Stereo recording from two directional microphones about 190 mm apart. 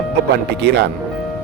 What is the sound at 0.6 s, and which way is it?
Speech, 65° right (ahead or behind).